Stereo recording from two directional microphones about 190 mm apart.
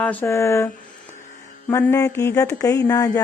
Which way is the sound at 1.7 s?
15° left (ahead or behind).